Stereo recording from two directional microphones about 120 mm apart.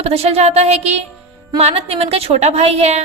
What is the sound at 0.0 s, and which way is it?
A woman's voice, 60° right (ahead or behind).